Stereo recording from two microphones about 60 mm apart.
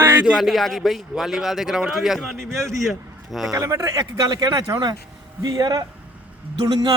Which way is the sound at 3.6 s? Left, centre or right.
Right.